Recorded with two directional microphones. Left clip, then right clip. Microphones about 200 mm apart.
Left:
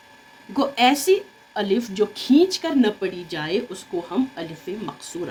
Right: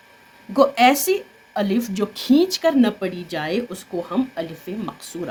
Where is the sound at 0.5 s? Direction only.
55° right (ahead or behind).